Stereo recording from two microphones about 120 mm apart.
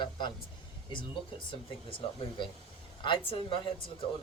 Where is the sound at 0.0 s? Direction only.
40° left (ahead or behind).